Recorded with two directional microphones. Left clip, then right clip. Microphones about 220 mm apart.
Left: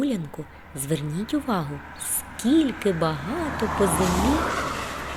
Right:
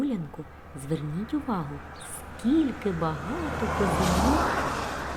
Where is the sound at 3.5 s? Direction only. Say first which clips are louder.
Left 3 dB; 45° right (ahead or behind).